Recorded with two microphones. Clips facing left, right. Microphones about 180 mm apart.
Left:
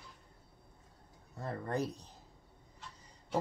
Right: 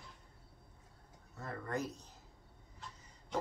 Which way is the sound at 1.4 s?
30° left (ahead or behind).